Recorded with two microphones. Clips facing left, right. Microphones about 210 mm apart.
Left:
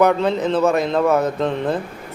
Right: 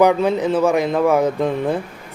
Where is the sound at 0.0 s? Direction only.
10° right (ahead or behind).